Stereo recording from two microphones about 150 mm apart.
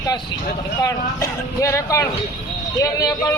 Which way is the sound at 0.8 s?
20° left (ahead or behind).